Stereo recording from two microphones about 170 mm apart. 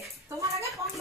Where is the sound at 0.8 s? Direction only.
20° right (ahead or behind).